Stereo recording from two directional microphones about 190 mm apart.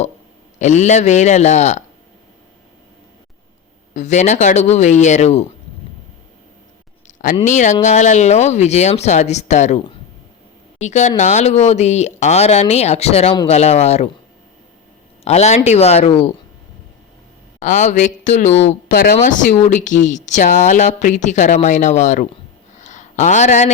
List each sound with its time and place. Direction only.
0.6 s speech: 40° left (ahead or behind)
3.9 s speech: 40° left (ahead or behind)
7.4 s speech: 40° left (ahead or behind)
15.2 s speech: 35° left (ahead or behind)
17.6 s speech: 40° left (ahead or behind)
22.7 s a sound: 40° left (ahead or behind)